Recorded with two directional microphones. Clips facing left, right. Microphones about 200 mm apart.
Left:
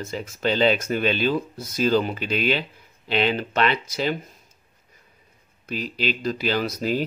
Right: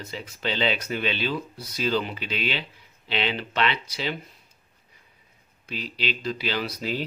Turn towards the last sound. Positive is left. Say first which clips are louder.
# left 5 dB
turn(degrees=45)  # may be behind; listen again after turning